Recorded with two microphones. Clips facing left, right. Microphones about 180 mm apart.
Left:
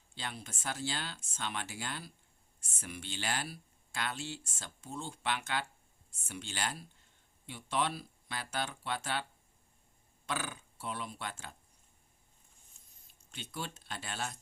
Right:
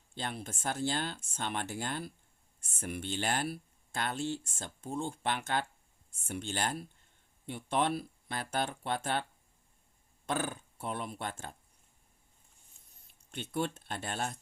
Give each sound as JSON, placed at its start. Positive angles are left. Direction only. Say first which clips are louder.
{"t": 0.1, "sound": "speech", "louder": "right 5 dB", "side_deg": -50}
{"t": 10.2, "sound": "speech", "louder": "right 5 dB", "side_deg": -50}
{"t": 13.3, "sound": "speech", "louder": "right 8 dB", "side_deg": -55}